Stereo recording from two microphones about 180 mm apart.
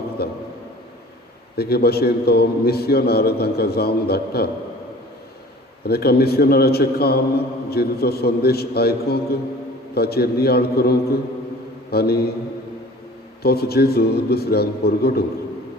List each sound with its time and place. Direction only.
0.2 s a man's voice: 60° left (ahead or behind)
1.5 s a man's voice: 60° left (ahead or behind)
5.8 s a man's voice: 60° left (ahead or behind)
13.4 s a man's voice: 60° left (ahead or behind)